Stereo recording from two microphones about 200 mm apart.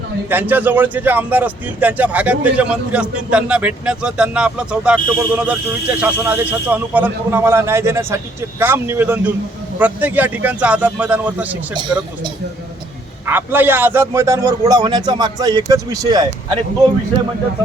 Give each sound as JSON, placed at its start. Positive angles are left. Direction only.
{"t": 0.3, "sound": "a man's voice", "side_deg": -10}
{"t": 11.7, "sound": "speech", "side_deg": -20}
{"t": 13.2, "sound": "a man's voice", "side_deg": -10}